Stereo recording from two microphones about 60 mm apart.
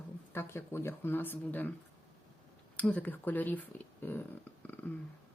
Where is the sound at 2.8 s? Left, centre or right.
Left.